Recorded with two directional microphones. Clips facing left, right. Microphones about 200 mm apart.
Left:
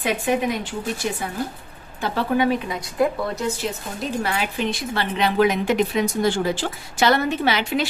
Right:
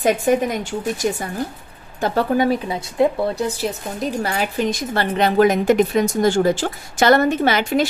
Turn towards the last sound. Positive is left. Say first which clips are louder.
# right 4 dB
turn(degrees=-45)  # may be behind; listen again after turning